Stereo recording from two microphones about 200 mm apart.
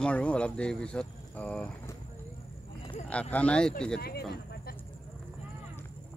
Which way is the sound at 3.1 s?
5° left (ahead or behind).